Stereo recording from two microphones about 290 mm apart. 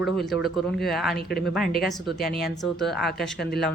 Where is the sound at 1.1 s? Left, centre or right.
Left.